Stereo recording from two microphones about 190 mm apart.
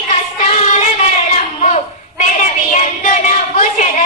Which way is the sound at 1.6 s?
35° left (ahead or behind).